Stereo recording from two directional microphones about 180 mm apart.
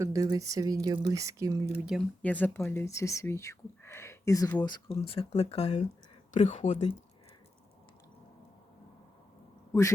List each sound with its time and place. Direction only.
0.0 s speech: 20° right (ahead or behind)
1.8 s speech: 5° right (ahead or behind)
2.2 s speech: 10° left (ahead or behind)
4.6 s speech: 25° left (ahead or behind)